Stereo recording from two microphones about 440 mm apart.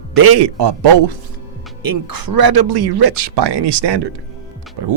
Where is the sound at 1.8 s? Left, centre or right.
Right.